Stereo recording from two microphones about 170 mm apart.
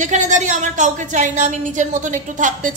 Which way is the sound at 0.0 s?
45° right (ahead or behind).